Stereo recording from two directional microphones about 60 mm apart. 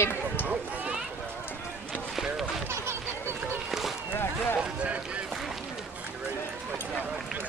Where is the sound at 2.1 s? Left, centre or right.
Centre.